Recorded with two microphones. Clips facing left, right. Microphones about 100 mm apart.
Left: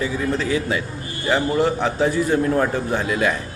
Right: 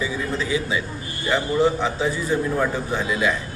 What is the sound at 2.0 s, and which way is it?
A man's voice, 50° left (ahead or behind).